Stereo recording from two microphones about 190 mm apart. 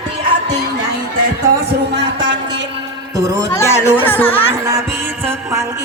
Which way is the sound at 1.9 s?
65° right (ahead or behind).